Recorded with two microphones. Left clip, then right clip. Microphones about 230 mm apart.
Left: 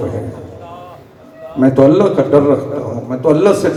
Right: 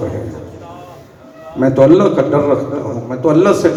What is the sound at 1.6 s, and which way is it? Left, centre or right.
A man's voice, right.